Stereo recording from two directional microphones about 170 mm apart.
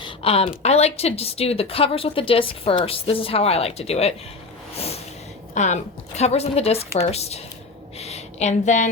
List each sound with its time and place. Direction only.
0.0 s speech: 35° left (ahead or behind)
5.5 s speech: 45° left (ahead or behind)
7.9 s a sound: 40° left (ahead or behind)